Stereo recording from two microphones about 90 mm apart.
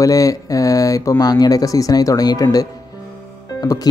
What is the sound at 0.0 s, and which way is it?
Speech, 40° left (ahead or behind).